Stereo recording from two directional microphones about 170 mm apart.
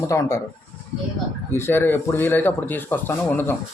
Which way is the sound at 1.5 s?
15° left (ahead or behind).